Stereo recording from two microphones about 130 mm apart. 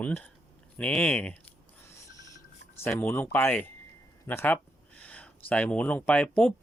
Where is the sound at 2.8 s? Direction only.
15° left (ahead or behind).